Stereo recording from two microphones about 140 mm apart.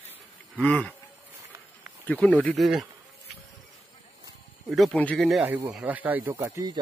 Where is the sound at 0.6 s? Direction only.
10° left (ahead or behind).